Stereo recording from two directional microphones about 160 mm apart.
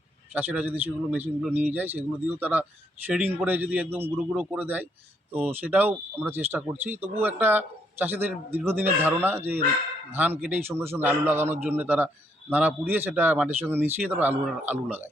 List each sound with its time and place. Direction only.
0.3 s speech: 10° right (ahead or behind)